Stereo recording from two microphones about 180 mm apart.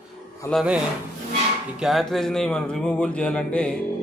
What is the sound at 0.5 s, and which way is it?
Speech, 5° right (ahead or behind).